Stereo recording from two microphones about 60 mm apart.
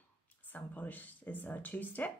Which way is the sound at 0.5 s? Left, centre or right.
Left.